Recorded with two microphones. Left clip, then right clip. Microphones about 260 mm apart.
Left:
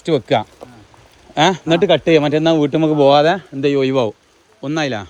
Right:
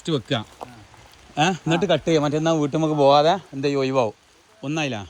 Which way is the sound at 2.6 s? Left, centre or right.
Left.